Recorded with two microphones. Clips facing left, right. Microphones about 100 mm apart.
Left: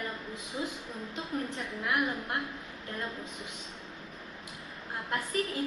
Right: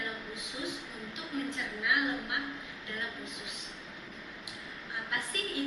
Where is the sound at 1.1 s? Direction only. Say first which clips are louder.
Left 1 dB; 40° left (ahead or behind).